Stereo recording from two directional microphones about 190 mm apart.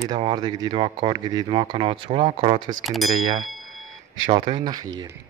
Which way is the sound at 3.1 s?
25° right (ahead or behind).